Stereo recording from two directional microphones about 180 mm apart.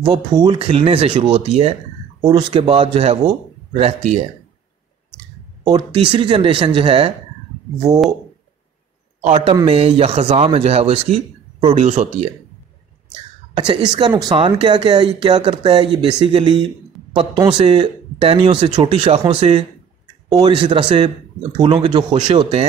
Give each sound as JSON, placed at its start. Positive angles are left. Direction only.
{"t": 0.0, "sound": "speech", "side_deg": -25}
{"t": 2.2, "sound": "speech", "side_deg": -25}
{"t": 5.6, "sound": "speech", "side_deg": -25}
{"t": 9.2, "sound": "speech", "side_deg": -30}
{"t": 13.6, "sound": "speech", "side_deg": -25}
{"t": 20.2, "sound": "speech", "side_deg": -25}